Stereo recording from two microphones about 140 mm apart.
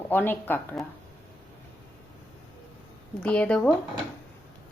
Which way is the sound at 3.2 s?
10° left (ahead or behind).